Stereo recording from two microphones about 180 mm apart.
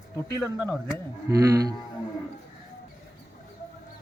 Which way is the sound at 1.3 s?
20° right (ahead or behind).